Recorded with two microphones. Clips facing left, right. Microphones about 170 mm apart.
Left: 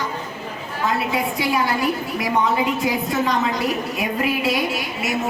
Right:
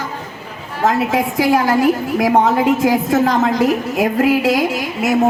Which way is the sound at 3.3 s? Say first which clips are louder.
Right 7 dB; 90° right.